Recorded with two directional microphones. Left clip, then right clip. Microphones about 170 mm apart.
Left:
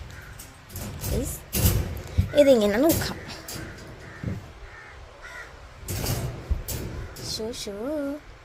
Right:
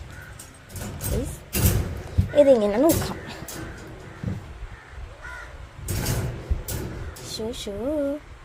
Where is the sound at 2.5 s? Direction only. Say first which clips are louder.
Right 1 dB; centre (ahead or behind).